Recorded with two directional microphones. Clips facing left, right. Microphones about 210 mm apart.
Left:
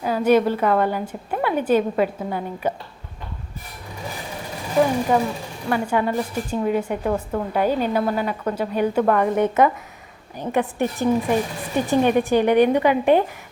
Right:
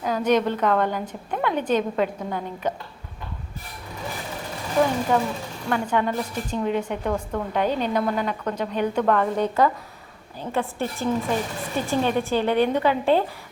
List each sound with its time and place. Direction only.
0.0 s a woman's voice: 10° left (ahead or behind)
5.6 s a woman's voice: 10° left (ahead or behind)